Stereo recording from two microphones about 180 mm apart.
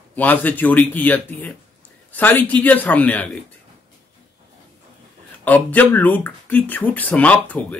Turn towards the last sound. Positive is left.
turn(degrees=10)  # may be behind; listen again after turning